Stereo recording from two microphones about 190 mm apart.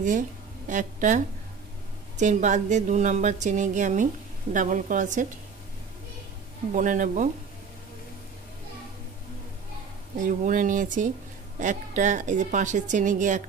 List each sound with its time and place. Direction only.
0.7 s a woman's voice: 40° right (ahead or behind)
6.7 s speech: 45° right (ahead or behind)
10.1 s a woman's voice: 40° right (ahead or behind)